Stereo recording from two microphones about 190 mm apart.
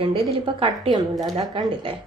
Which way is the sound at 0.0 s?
25° right (ahead or behind).